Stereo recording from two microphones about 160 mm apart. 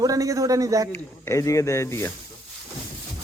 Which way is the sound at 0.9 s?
15° left (ahead or behind).